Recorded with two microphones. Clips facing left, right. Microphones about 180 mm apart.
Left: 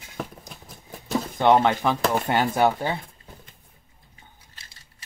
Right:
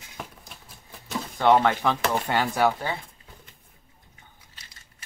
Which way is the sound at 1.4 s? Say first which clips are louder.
Left 1 dB; 15° left (ahead or behind).